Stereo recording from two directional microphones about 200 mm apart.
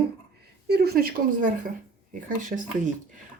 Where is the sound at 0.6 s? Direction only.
50° right (ahead or behind).